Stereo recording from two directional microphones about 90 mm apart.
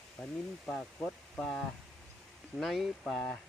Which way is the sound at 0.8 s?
Centre (ahead or behind).